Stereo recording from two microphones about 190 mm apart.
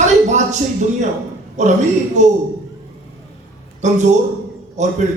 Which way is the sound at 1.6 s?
40° right (ahead or behind).